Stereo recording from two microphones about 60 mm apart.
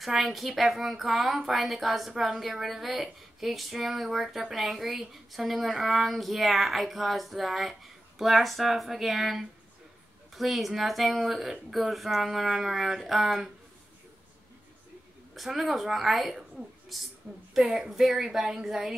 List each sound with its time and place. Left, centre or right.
0.0 s a woman's voice: centre
15.3 s speech: centre
17.3 s a woman's voice: right
17.6 s a woman's voice: centre